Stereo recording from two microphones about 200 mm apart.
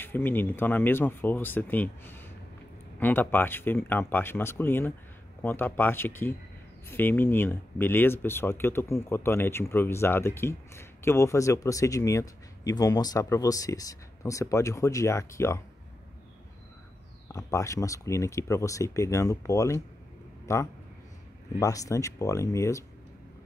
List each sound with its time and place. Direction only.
0.0 s speech: 10° left (ahead or behind)
17.3 s speech: 15° left (ahead or behind)